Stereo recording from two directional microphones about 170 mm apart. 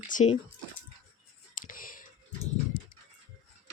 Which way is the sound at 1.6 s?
55° left (ahead or behind).